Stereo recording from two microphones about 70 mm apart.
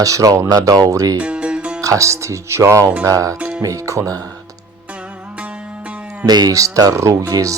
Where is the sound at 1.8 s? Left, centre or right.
Right.